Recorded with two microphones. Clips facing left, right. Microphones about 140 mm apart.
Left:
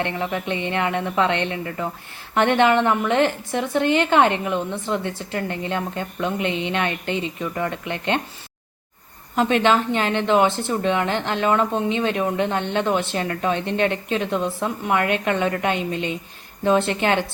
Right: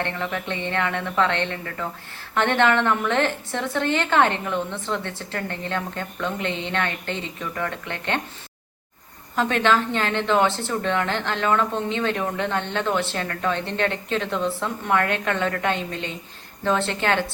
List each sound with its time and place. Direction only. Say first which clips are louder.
0.0 s speech: left 3 dB; 15° left (ahead or behind)
9.3 s speech: left 3 dB; 15° left (ahead or behind)